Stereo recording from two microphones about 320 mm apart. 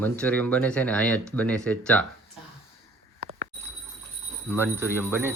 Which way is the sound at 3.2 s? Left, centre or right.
Right.